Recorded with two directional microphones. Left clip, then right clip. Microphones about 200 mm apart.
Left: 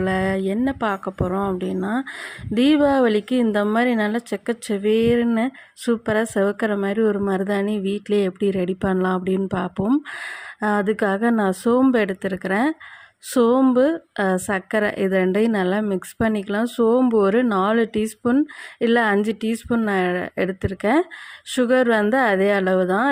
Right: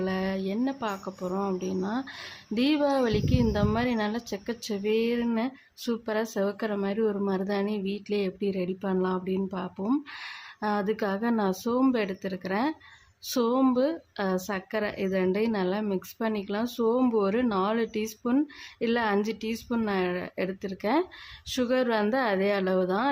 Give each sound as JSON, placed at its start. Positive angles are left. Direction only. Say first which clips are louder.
{"t": 0.0, "sound": "speech", "louder": "left 9 dB", "side_deg": 25}